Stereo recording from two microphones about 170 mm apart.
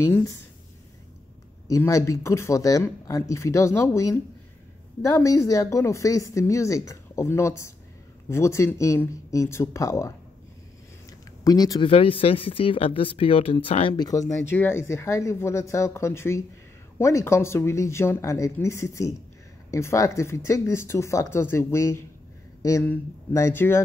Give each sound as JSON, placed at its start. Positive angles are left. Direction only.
{"t": 0.1, "sound": "speech", "side_deg": 20}
{"t": 1.7, "sound": "speech", "side_deg": 20}
{"t": 11.4, "sound": "speech", "side_deg": 20}
{"t": 14.4, "sound": "speech", "side_deg": 15}